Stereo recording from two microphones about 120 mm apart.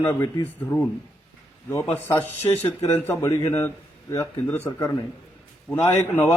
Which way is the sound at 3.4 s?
25° left (ahead or behind).